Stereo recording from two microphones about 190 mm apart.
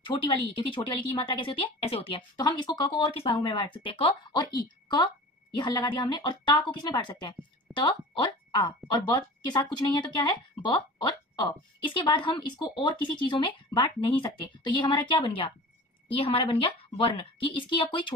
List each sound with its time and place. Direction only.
0.0 s speech: 25° left (ahead or behind)